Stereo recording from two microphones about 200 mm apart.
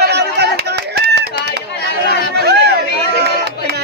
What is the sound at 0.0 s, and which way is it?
Clapping, 55° right (ahead or behind).